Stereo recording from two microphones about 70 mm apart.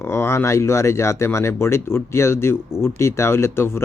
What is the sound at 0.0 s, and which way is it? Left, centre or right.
Speech, left.